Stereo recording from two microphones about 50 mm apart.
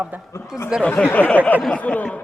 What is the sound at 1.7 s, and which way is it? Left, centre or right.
Speech, left.